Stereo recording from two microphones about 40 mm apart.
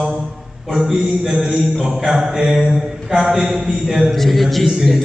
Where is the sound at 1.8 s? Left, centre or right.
Centre.